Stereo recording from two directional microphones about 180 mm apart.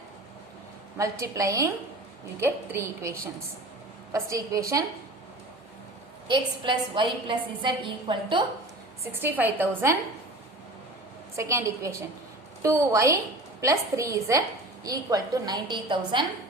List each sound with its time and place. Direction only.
0.9 s a woman's voice: 15° right (ahead or behind)
6.2 s a woman's voice: 25° right (ahead or behind)
9.1 s a woman's voice: 10° right (ahead or behind)
11.3 s a woman's voice: 15° right (ahead or behind)